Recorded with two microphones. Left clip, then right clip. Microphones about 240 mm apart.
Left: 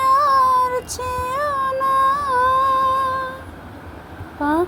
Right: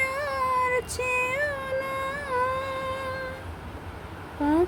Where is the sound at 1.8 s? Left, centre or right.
Centre.